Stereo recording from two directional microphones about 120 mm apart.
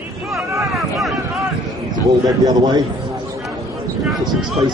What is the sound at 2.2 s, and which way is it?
Speech, 30° right (ahead or behind).